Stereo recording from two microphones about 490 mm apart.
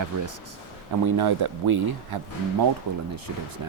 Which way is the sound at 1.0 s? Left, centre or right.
Right.